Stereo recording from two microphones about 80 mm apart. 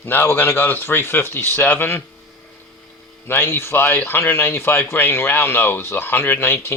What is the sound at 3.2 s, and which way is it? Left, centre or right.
Speech, left.